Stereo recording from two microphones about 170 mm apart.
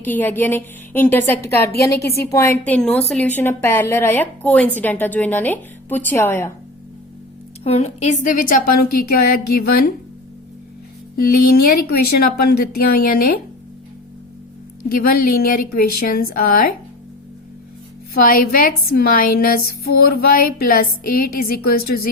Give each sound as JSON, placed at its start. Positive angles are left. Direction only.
{"t": 0.0, "sound": "a woman's voice", "side_deg": 10}
{"t": 7.6, "sound": "a woman's voice", "side_deg": 40}
{"t": 11.2, "sound": "a woman's voice", "side_deg": 60}
{"t": 14.8, "sound": "a woman's voice", "side_deg": 55}
{"t": 18.1, "sound": "a woman's voice", "side_deg": 60}